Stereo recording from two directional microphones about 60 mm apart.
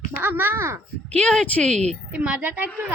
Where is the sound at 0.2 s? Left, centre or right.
Right.